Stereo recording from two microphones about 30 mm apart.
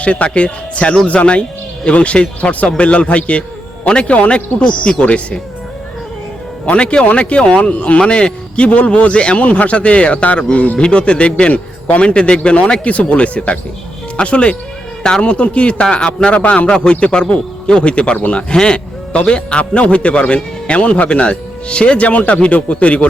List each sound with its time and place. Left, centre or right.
0.0 s a man's voice: left
0.3 s a man's voice: left
1.0 s speech: left
2.7 s a man's voice: left
6.7 s a man's voice: left
10.8 s a man's voice: left
12.8 s a man's voice: left
16.3 s a man's voice: left
16.7 s a man's voice: left
18.5 s a man's voice: left